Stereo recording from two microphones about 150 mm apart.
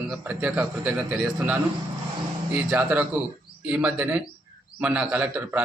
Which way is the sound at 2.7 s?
10° right (ahead or behind).